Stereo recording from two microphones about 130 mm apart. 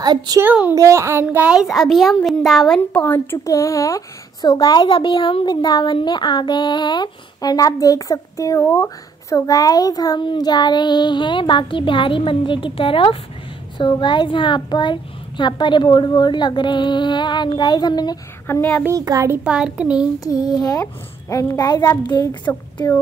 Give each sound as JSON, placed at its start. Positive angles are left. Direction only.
{"t": 0.0, "sound": "a woman's voice", "side_deg": -30}
{"t": 0.4, "sound": "a child's voice", "side_deg": -15}
{"t": 1.2, "sound": "a child's voice", "side_deg": -10}
{"t": 18.5, "sound": "a child's voice", "side_deg": 10}
{"t": 18.9, "sound": "a child's voice", "side_deg": -25}
{"t": 19.3, "sound": "a child's voice", "side_deg": -5}
{"t": 20.2, "sound": "a child's voice", "side_deg": 30}